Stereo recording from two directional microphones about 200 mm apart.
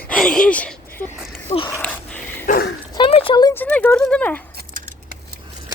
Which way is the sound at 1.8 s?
5° left (ahead or behind).